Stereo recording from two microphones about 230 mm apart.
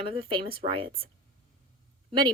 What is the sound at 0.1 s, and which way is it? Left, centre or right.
A woman's voice, right.